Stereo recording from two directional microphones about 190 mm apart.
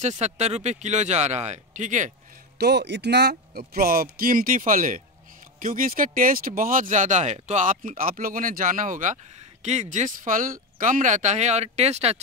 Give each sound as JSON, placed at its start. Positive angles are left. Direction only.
{"t": 0.0, "sound": "speech", "side_deg": -35}
{"t": 2.6, "sound": "speech", "side_deg": -65}